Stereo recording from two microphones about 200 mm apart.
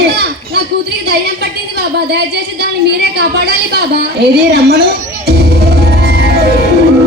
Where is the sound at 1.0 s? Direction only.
55° right (ahead or behind).